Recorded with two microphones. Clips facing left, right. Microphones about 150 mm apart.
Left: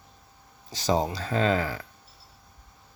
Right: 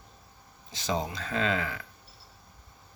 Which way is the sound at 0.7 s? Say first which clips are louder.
Left 6 dB; 40° left (ahead or behind).